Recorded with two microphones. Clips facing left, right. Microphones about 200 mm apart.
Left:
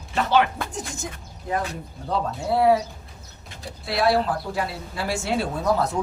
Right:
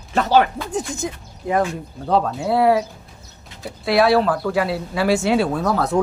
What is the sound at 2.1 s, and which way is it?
Speech, 70° right (ahead or behind).